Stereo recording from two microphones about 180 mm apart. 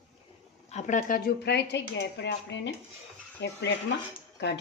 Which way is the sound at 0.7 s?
40° left (ahead or behind).